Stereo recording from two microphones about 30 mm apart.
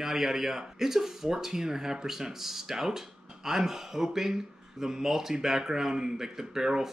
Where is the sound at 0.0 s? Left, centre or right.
Centre.